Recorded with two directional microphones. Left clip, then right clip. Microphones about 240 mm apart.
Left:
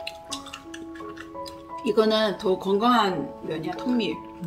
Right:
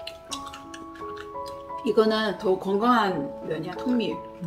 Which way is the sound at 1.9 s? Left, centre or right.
Left.